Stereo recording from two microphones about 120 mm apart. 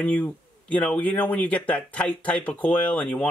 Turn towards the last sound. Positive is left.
turn(degrees=10)  # may be behind; listen again after turning